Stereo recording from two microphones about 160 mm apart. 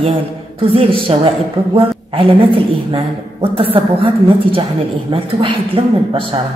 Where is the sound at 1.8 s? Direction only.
35° right (ahead or behind).